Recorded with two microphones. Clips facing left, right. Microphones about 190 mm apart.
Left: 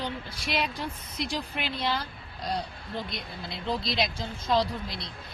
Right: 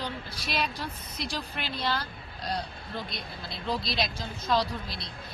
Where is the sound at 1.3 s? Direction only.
20° left (ahead or behind).